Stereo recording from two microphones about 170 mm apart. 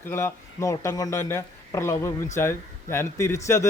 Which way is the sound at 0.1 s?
15° left (ahead or behind).